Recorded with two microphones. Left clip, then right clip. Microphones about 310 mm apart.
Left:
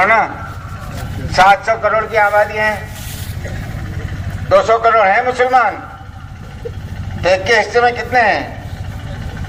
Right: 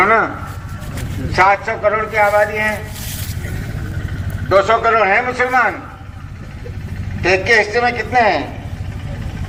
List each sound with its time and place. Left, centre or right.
1.3 s a man's voice: left
4.4 s a man's voice: left
7.2 s a man's voice: left